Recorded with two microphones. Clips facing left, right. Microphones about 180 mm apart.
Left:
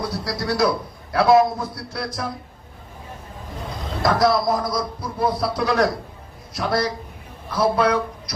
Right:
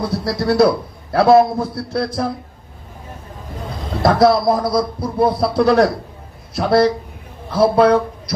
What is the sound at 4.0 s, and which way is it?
A man's voice, 30° right (ahead or behind).